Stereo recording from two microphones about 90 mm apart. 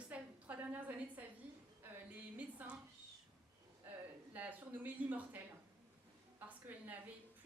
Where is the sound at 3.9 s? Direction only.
20° right (ahead or behind).